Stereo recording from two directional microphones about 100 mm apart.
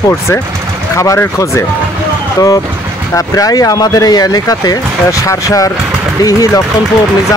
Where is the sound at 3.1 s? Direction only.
35° left (ahead or behind).